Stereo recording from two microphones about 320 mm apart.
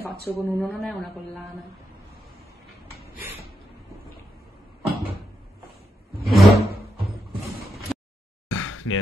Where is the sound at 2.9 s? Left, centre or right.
Centre.